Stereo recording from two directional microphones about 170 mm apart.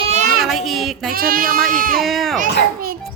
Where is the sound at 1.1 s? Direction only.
60° right (ahead or behind).